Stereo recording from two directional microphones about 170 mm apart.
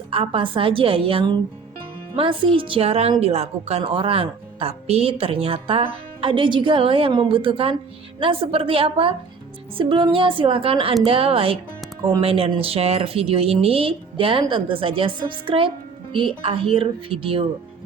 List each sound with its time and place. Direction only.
0.1 s a woman's voice: 35° right (ahead or behind)